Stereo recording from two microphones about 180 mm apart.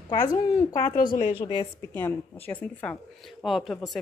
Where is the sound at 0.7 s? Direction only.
45° left (ahead or behind).